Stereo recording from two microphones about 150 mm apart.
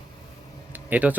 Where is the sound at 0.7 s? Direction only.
10° right (ahead or behind).